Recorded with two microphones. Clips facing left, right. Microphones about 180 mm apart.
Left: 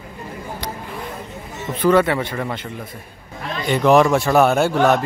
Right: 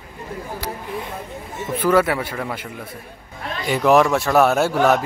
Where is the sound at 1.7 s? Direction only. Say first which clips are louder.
Left 2 dB; 5° right (ahead or behind).